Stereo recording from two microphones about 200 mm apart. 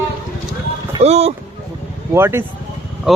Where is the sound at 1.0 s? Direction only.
30° right (ahead or behind).